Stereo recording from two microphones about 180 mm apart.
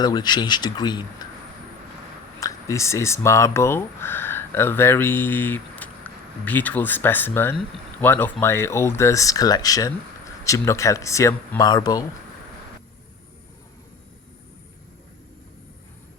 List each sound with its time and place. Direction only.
0.0 s speech: 20° left (ahead or behind)
2.4 s speech: 15° left (ahead or behind)